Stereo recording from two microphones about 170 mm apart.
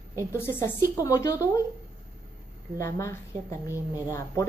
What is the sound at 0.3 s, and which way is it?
A woman's voice, 15° left (ahead or behind).